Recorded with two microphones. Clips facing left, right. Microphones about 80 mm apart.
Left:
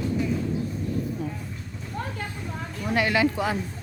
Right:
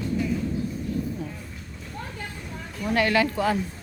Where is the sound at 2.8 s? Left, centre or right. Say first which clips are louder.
Right 1 dB; centre.